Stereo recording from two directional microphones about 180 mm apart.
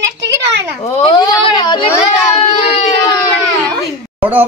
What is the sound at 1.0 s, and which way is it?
Speech, 25° left (ahead or behind).